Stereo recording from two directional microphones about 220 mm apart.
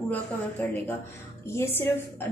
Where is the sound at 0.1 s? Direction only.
10° left (ahead or behind).